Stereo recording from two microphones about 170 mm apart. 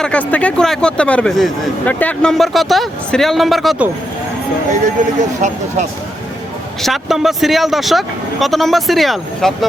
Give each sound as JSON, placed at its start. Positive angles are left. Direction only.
{"t": 0.0, "sound": "speech", "side_deg": 10}
{"t": 5.0, "sound": "speech", "side_deg": -45}
{"t": 6.8, "sound": "speech", "side_deg": 0}